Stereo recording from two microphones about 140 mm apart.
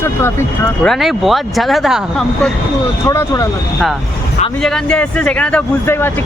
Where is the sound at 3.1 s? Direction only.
25° left (ahead or behind).